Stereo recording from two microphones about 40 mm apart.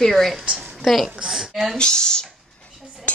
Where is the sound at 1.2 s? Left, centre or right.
Centre.